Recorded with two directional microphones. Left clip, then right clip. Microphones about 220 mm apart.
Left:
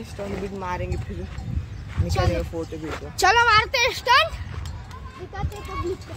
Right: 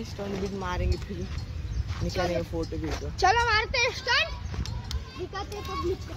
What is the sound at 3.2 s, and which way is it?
Speech, 55° left (ahead or behind).